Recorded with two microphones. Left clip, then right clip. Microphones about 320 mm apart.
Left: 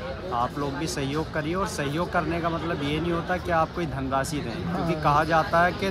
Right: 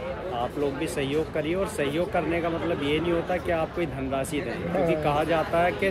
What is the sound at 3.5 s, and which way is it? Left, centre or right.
Speech, centre.